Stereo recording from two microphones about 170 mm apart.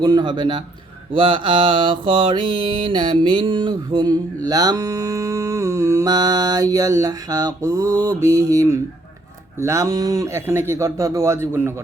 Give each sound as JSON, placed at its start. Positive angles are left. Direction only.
{"t": 0.0, "sound": "mantra", "side_deg": -25}
{"t": 9.6, "sound": "speech", "side_deg": -15}